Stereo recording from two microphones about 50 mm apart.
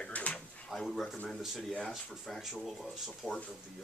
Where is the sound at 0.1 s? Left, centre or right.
Left.